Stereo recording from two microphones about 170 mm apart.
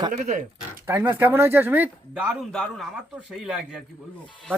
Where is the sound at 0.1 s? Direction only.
45° right (ahead or behind).